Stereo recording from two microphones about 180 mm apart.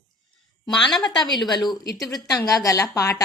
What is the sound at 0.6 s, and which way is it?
Speech, 5° left (ahead or behind).